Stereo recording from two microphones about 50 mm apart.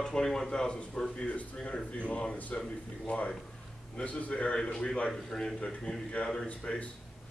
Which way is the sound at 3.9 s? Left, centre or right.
Left.